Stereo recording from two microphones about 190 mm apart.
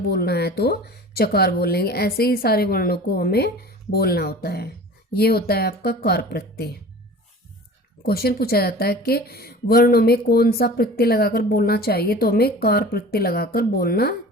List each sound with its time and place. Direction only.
0.1 s speech: 60° left (ahead or behind)
8.0 s speech: 55° left (ahead or behind)